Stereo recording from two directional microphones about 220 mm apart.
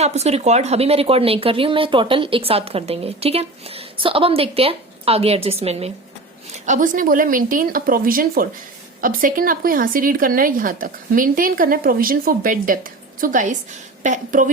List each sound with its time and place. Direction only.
0.0 s speech: 30° right (ahead or behind)